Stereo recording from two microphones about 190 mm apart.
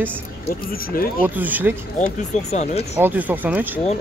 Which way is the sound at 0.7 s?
50° left (ahead or behind).